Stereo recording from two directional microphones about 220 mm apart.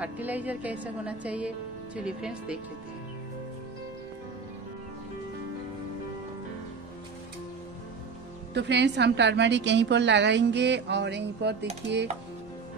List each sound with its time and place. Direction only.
0.0 s a woman's voice: 5° right (ahead or behind)
8.5 s a woman's voice: 50° right (ahead or behind)